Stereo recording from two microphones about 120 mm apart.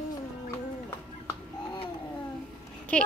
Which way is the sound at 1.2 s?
40° left (ahead or behind).